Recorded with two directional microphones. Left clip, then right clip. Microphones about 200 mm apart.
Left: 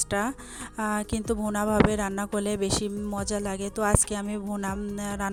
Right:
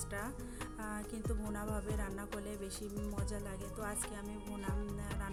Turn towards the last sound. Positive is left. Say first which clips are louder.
# left 12 dB
turn(degrees=50)  # may be behind; listen again after turning